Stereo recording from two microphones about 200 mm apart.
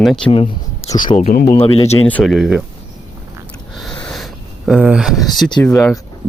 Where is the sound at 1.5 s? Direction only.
10° left (ahead or behind).